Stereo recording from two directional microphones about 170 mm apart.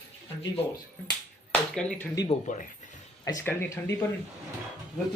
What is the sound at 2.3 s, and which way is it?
Speech, 45° left (ahead or behind).